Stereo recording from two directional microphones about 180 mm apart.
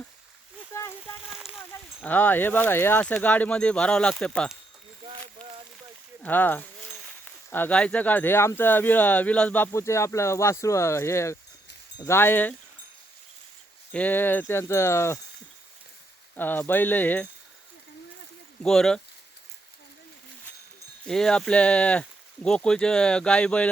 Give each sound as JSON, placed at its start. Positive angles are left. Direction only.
{"t": 0.7, "sound": "a sound", "side_deg": 15}
{"t": 1.3, "sound": "speech", "side_deg": -5}
{"t": 2.0, "sound": "speech", "side_deg": 10}
{"t": 6.2, "sound": "speech", "side_deg": 10}
{"t": 13.9, "sound": "speech", "side_deg": 10}
{"t": 16.3, "sound": "speech", "side_deg": 10}
{"t": 18.6, "sound": "speech", "side_deg": 5}
{"t": 21.1, "sound": "speech", "side_deg": 5}